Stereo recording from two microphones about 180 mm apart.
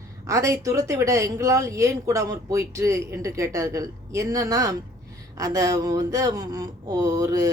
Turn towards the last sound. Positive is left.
turn(degrees=-20)  # may be behind; listen again after turning